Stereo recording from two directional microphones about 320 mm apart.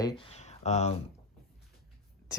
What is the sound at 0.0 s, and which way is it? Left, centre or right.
Speech, centre.